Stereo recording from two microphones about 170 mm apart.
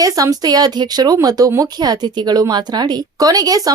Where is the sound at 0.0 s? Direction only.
20° right (ahead or behind).